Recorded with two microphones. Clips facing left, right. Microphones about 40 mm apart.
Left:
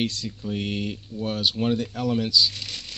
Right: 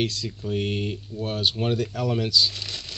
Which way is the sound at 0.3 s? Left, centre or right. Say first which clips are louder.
Right 2 dB; centre.